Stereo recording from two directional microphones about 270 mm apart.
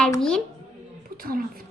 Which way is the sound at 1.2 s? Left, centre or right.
Right.